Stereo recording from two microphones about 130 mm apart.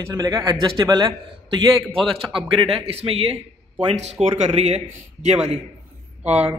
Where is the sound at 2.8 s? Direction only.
50° right (ahead or behind).